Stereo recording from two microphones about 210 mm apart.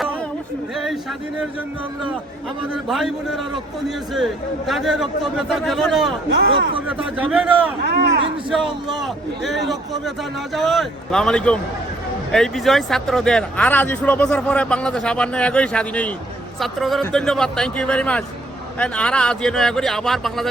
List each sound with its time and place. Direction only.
2.7 s speech: centre (ahead or behind)
6.3 s speech: 55° right (ahead or behind)
6.8 s a man's voice: 5° right (ahead or behind)
7.9 s speech: 50° right (ahead or behind)
8.4 s speech: 5° right (ahead or behind)
10.5 s speech: centre (ahead or behind)